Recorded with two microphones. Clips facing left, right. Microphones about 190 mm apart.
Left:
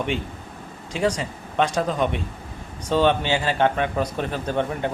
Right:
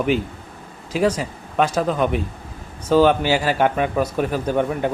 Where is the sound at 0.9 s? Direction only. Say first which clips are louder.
Right 4 dB; 5° right (ahead or behind).